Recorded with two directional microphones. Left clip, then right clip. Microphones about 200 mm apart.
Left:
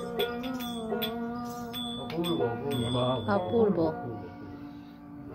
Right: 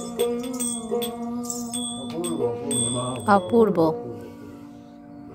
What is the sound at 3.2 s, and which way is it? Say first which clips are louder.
Speech: right 11 dB; 50° right (ahead or behind).